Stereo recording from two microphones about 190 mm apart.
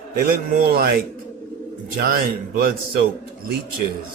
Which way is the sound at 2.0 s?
50° right (ahead or behind).